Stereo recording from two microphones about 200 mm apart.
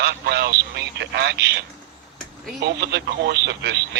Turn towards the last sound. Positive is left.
turn(degrees=-60)  # may be behind; listen again after turning